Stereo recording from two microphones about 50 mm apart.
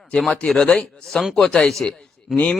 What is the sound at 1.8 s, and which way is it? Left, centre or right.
Speech, left.